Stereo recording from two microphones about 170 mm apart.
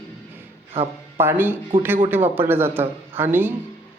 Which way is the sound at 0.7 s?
35° right (ahead or behind).